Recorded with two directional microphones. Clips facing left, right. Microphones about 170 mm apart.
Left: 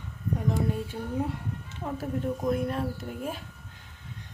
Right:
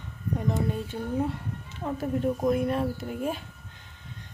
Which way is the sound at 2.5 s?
5° right (ahead or behind).